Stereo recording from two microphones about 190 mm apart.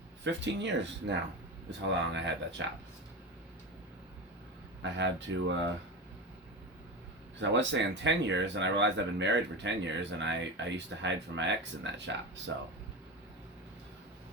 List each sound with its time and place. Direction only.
0.3 s speech: 70° right (ahead or behind)
4.8 s speech: 70° right (ahead or behind)
7.3 s speech: 75° right (ahead or behind)